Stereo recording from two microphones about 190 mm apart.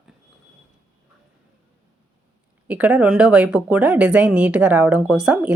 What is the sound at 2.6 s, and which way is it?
Speech, 10° right (ahead or behind).